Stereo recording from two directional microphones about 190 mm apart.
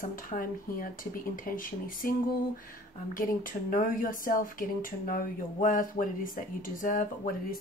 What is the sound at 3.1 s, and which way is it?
Speech, 45° left (ahead or behind).